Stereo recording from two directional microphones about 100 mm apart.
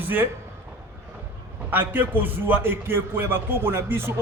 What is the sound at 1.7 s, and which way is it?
A man's voice, 20° right (ahead or behind).